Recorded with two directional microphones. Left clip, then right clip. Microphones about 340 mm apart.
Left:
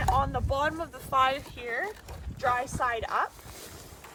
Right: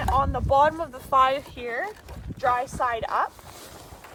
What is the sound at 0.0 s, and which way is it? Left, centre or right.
Speech, centre.